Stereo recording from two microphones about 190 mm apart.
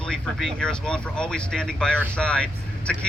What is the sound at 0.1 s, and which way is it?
Speech, 5° left (ahead or behind).